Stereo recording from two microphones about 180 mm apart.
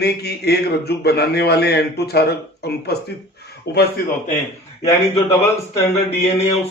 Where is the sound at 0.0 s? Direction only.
65° left (ahead or behind).